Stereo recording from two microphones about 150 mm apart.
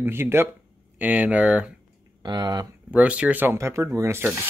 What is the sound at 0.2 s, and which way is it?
Speech, 15° right (ahead or behind).